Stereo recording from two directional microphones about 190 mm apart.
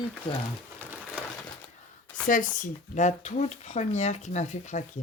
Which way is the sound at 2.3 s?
45° left (ahead or behind).